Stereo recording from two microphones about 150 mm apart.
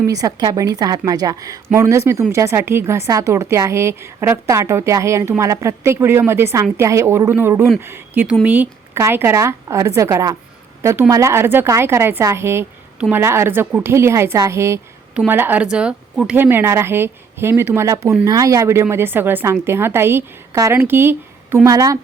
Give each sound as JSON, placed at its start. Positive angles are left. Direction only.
{"t": 0.0, "sound": "a woman's voice", "side_deg": -20}